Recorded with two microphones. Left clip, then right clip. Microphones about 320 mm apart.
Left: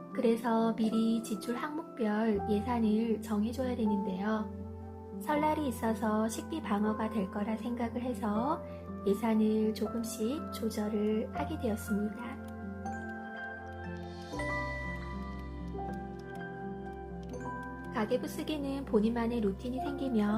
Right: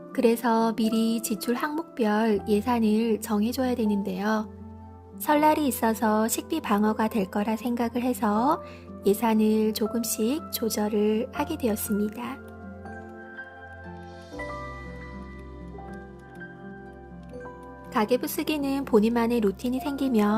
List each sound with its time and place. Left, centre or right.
0.2 s speech: right
17.9 s speech: right